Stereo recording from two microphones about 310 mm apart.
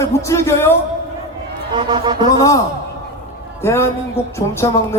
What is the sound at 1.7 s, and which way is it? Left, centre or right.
Speech, centre.